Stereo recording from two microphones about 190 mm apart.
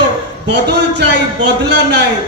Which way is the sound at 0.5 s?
65° right (ahead or behind).